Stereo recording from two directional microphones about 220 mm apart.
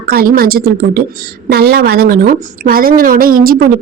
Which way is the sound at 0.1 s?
45° right (ahead or behind).